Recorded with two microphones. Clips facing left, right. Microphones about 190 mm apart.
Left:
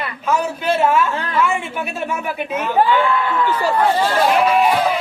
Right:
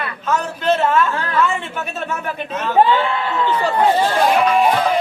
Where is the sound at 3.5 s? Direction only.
10° left (ahead or behind).